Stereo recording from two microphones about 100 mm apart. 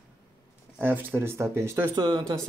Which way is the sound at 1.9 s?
50° right (ahead or behind).